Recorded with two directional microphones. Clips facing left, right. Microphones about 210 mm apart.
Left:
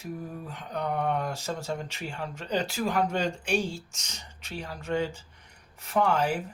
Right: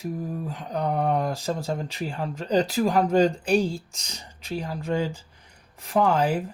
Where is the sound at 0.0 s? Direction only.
35° right (ahead or behind).